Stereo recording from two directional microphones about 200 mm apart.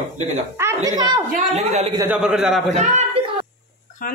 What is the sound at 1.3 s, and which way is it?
Speech, 35° right (ahead or behind).